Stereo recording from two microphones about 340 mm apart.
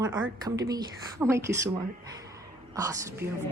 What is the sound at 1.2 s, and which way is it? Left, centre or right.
Music, centre.